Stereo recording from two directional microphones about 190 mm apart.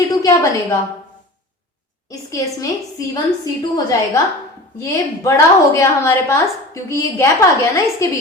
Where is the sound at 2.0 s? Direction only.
20° left (ahead or behind).